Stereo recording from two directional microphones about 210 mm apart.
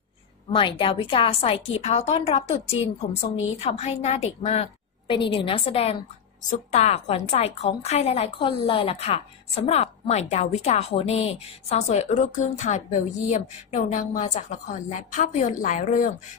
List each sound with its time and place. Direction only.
0.5 s a woman's voice: 25° left (ahead or behind)